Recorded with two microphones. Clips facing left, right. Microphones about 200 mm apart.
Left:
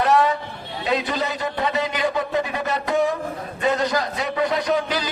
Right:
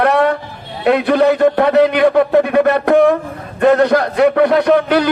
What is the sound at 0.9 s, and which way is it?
A man's voice, 60° right (ahead or behind).